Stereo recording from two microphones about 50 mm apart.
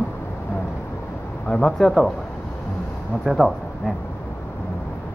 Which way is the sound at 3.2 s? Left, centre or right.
Centre.